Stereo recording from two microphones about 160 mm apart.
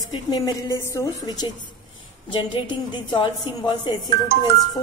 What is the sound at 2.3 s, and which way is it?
A woman's voice, 30° left (ahead or behind).